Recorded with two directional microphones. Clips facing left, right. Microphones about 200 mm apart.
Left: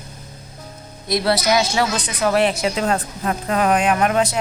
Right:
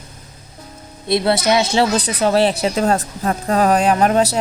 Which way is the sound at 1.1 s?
25° right (ahead or behind).